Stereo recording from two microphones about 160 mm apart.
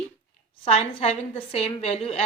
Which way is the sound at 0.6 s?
40° left (ahead or behind).